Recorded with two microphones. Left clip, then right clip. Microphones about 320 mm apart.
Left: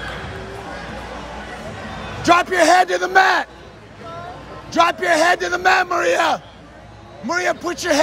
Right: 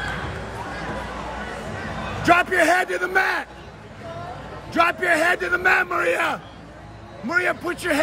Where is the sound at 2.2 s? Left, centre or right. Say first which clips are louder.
Left 3 dB; centre.